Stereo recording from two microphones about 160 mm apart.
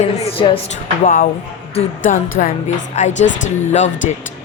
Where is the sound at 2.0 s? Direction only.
55° left (ahead or behind).